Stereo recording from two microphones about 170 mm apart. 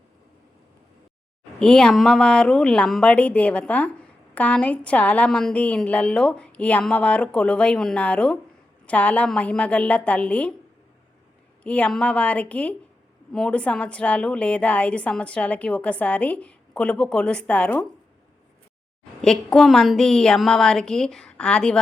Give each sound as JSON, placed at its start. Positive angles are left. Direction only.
{"t": 1.5, "sound": "a woman's voice", "side_deg": 5}
{"t": 11.6, "sound": "a woman's voice", "side_deg": 10}
{"t": 19.2, "sound": "a woman's voice", "side_deg": 5}